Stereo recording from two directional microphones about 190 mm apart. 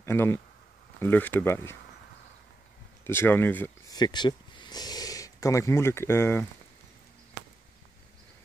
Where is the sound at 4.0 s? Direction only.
25° left (ahead or behind).